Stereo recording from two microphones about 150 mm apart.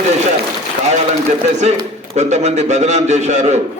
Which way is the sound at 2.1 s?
50° right (ahead or behind).